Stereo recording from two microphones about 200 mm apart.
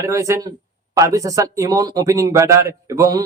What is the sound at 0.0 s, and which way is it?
A man's voice, 15° right (ahead or behind).